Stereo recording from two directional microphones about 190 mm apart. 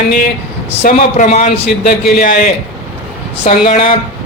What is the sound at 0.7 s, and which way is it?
Speech, 35° left (ahead or behind).